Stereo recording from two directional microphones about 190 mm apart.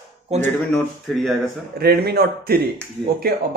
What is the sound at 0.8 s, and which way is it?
Speech, centre (ahead or behind).